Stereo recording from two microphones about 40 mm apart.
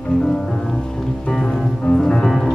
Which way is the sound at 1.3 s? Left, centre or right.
Centre.